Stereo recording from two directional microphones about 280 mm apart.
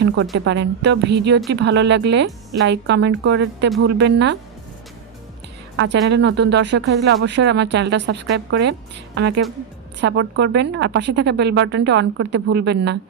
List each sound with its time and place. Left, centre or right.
0.3 s speech: right
5.7 s speech: right